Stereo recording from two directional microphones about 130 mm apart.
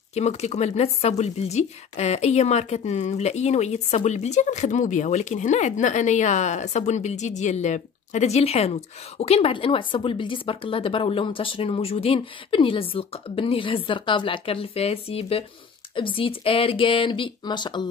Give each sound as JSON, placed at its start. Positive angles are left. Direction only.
{"t": 0.1, "sound": "speech", "side_deg": 60}